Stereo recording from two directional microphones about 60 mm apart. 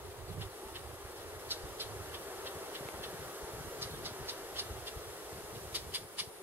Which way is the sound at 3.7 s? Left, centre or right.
Right.